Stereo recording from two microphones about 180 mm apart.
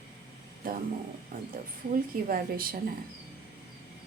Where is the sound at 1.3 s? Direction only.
60° right (ahead or behind).